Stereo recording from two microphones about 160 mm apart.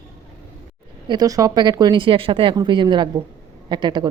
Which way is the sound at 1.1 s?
25° right (ahead or behind).